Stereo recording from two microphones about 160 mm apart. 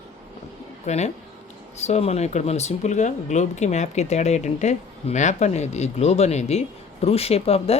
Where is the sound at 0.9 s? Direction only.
45° left (ahead or behind).